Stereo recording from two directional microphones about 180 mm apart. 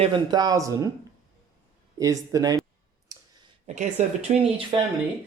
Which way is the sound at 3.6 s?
40° right (ahead or behind).